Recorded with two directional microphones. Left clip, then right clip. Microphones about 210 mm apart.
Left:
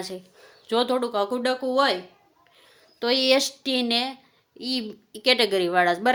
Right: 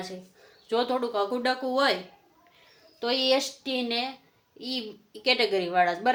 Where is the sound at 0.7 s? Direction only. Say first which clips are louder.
Left 3 dB; 40° left (ahead or behind).